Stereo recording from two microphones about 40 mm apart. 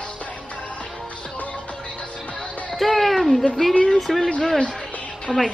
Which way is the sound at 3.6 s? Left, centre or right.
Centre.